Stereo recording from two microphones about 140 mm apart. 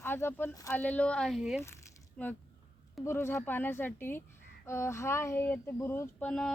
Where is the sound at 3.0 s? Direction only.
20° left (ahead or behind).